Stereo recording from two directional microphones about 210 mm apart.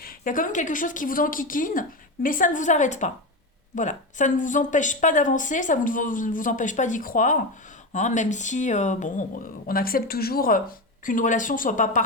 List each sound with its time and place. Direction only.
0.0 s speech: 40° left (ahead or behind)